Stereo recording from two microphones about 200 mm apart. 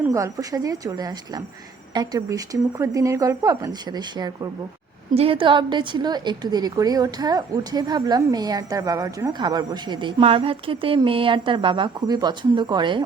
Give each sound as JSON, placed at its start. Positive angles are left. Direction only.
{"t": 0.0, "sound": "a woman's voice", "side_deg": -15}